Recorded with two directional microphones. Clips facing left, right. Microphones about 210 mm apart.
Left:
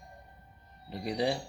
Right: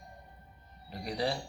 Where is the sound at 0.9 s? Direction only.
20° left (ahead or behind).